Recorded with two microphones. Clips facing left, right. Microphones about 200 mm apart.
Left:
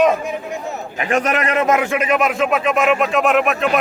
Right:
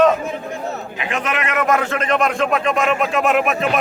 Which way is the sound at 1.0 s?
45° left (ahead or behind).